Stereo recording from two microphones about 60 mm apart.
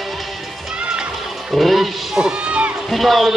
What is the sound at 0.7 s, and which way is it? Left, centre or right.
Music, centre.